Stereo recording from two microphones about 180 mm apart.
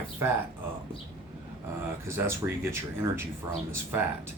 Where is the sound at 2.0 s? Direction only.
15° right (ahead or behind).